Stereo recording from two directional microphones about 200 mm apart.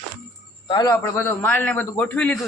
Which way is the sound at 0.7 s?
20° left (ahead or behind).